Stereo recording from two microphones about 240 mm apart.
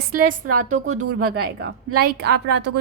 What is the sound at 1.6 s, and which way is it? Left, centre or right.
A woman's voice, right.